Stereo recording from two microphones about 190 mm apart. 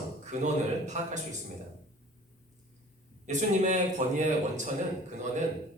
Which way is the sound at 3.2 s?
40° right (ahead or behind).